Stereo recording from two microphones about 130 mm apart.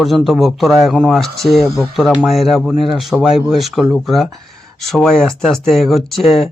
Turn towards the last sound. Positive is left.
turn(degrees=0)  # may be behind; listen again after turning